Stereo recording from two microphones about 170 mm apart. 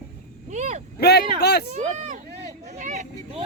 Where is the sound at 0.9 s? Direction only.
70° left (ahead or behind).